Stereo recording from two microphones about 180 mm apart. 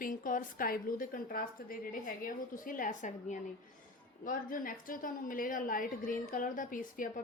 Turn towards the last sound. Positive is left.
turn(degrees=50)  # may be behind; listen again after turning